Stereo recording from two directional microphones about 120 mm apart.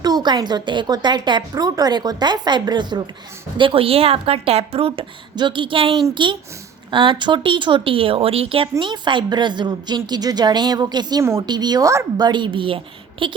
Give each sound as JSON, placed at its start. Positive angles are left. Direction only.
{"t": 0.0, "sound": "a woman's voice", "side_deg": -35}
{"t": 3.6, "sound": "a woman's voice", "side_deg": -50}
{"t": 11.2, "sound": "speech", "side_deg": -20}
{"t": 11.4, "sound": "a woman's voice", "side_deg": -35}